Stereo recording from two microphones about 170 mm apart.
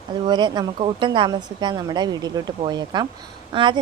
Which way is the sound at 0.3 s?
25° right (ahead or behind).